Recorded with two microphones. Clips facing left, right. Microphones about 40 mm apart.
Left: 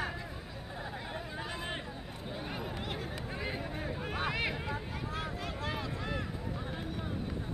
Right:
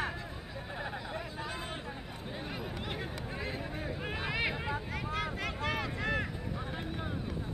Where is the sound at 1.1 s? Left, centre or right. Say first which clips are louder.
Right 1 dB; centre.